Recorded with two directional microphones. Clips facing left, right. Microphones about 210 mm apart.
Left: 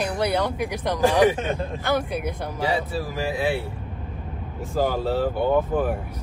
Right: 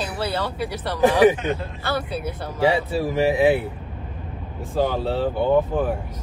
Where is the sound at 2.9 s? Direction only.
25° right (ahead or behind).